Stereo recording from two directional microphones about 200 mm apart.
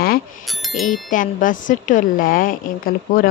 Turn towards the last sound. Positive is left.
turn(degrees=45)  # may be behind; listen again after turning